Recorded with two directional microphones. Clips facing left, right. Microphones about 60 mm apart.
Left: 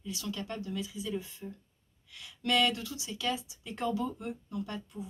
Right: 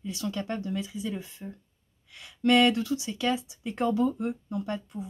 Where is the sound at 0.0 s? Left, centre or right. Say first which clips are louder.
Right 5 dB; right.